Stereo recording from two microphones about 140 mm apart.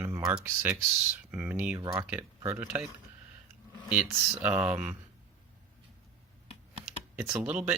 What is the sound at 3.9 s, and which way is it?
Speech, 10° right (ahead or behind).